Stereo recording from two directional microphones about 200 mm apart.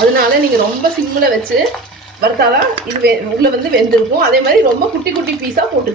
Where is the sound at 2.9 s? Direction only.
35° right (ahead or behind).